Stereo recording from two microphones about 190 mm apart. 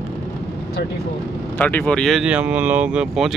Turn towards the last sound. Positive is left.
turn(degrees=-5)  # may be behind; listen again after turning